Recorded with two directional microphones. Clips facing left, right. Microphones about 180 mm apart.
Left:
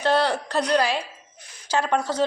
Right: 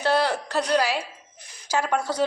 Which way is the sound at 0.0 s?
10° right (ahead or behind).